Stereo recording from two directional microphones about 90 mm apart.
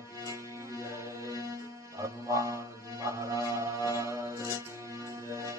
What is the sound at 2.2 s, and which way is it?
Music, 35° right (ahead or behind).